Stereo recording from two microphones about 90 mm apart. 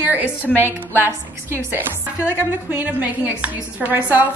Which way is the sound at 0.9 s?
25° right (ahead or behind).